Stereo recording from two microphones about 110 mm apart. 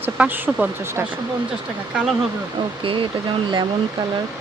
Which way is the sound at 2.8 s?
50° right (ahead or behind).